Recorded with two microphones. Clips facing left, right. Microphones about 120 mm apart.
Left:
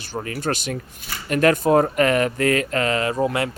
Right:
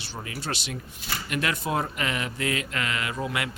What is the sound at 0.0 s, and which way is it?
Speech, 50° left (ahead or behind).